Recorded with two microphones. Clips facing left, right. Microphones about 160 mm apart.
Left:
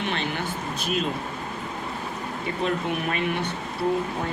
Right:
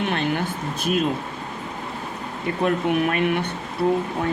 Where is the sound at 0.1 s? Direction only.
50° right (ahead or behind).